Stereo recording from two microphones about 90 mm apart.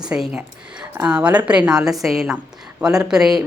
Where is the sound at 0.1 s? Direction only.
10° right (ahead or behind).